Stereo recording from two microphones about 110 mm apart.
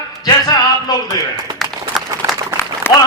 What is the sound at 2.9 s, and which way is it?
Speech, 20° left (ahead or behind).